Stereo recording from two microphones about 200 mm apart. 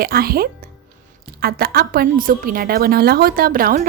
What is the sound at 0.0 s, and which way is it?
A woman's voice, 50° right (ahead or behind).